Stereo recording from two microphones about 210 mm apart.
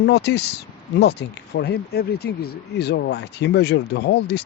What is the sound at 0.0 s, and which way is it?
Speech, 50° left (ahead or behind).